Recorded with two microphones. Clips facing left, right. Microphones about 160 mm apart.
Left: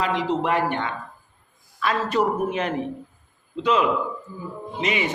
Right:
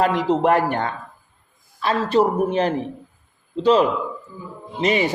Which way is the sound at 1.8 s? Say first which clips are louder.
Right 4 dB; 30° right (ahead or behind).